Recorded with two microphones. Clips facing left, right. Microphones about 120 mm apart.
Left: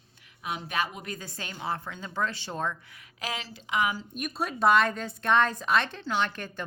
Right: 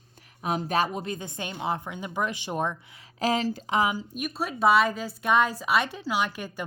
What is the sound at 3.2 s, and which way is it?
Speech, 40° right (ahead or behind).